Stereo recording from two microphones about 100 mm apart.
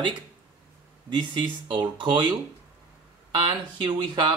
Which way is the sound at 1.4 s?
55° right (ahead or behind).